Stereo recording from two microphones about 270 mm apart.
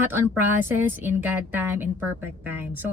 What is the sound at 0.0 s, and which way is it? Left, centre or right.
A woman's voice, centre.